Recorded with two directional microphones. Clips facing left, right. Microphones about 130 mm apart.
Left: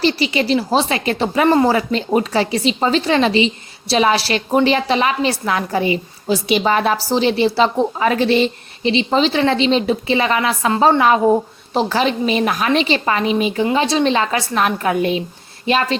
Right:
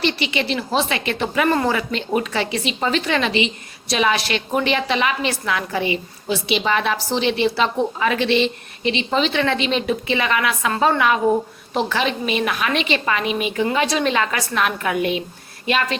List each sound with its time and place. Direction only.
0.0 s a woman's voice: 35° left (ahead or behind)